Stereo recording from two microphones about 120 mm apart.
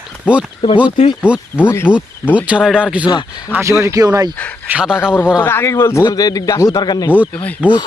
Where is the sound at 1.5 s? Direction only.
15° left (ahead or behind).